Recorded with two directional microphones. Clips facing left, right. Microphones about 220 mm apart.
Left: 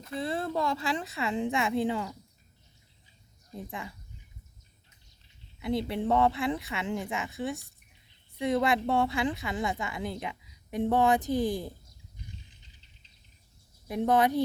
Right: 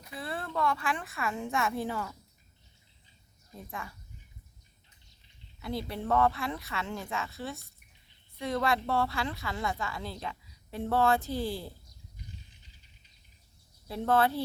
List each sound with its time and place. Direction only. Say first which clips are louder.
0.2 s speech: left 3 dB; 25° left (ahead or behind)
3.5 s speech: left 3 dB; 20° left (ahead or behind)
5.5 s a woman's voice: left 6 dB; 20° left (ahead or behind)
13.8 s a woman's voice: left 2 dB; 15° left (ahead or behind)